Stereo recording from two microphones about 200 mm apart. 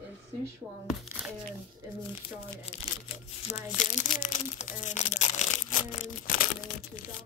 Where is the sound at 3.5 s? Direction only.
40° left (ahead or behind).